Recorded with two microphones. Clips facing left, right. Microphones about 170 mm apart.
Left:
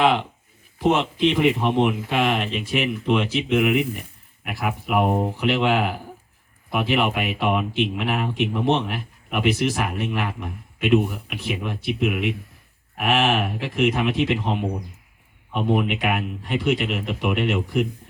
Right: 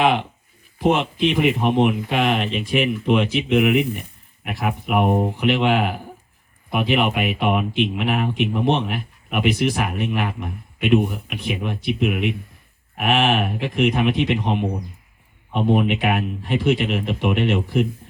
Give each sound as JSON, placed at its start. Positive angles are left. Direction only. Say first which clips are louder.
{"t": 0.0, "sound": "speech", "louder": "right 1 dB", "side_deg": -15}
{"t": 15.5, "sound": "speech", "louder": "right 3 dB", "side_deg": -30}